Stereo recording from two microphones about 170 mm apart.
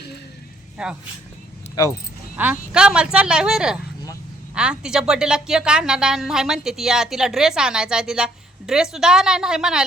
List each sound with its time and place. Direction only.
0.8 s a woman's voice: 5° right (ahead or behind)
1.8 s speech: 25° left (ahead or behind)
2.4 s a woman's voice: 10° right (ahead or behind)